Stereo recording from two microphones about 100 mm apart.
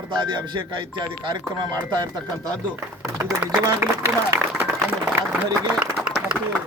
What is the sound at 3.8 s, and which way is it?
A man's voice, 20° right (ahead or behind).